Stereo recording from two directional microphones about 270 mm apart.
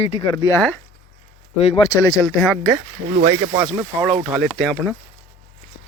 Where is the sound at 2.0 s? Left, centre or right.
Centre.